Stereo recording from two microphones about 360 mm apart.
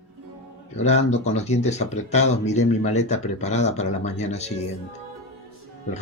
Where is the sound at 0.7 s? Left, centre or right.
Centre.